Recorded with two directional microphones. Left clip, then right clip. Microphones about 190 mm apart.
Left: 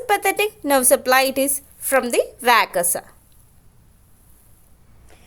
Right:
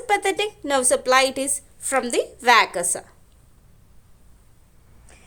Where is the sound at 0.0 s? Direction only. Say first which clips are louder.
Left 2 dB; 15° left (ahead or behind).